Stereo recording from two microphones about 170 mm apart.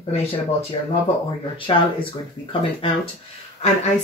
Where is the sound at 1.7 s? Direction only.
30° left (ahead or behind).